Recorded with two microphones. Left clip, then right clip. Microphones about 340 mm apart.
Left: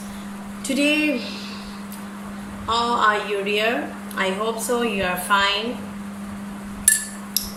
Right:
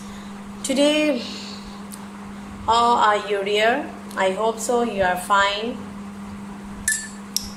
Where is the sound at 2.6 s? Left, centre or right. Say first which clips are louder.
Right 3 dB; right.